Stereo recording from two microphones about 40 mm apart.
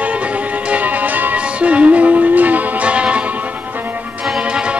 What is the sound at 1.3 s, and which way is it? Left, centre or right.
Music, right.